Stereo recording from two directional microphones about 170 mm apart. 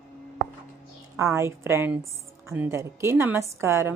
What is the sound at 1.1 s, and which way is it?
Speech, 15° right (ahead or behind).